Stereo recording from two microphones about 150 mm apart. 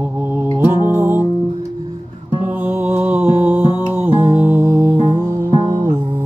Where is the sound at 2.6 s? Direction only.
10° right (ahead or behind).